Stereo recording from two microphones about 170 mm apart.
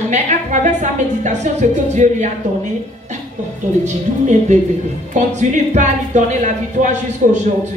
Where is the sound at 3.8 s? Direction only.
45° right (ahead or behind).